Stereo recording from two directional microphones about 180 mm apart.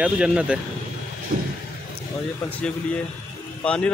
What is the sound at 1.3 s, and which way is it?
Vehicle, 50° right (ahead or behind).